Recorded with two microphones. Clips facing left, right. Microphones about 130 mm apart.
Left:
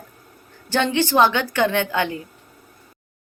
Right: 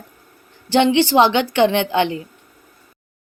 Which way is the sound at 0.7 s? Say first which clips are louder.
Right 5 dB; 15° right (ahead or behind).